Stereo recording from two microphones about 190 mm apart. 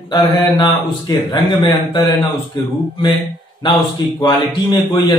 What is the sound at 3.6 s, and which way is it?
A man's voice, 25° left (ahead or behind).